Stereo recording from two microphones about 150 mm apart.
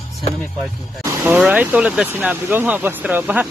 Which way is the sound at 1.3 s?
10° right (ahead or behind).